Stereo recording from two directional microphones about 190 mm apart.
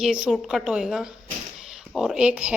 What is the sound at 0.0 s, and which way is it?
Speech, 5° right (ahead or behind).